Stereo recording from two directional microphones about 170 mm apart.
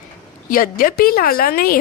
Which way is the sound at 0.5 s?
55° left (ahead or behind).